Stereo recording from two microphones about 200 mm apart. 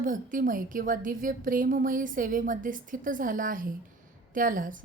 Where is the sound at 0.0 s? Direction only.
40° right (ahead or behind).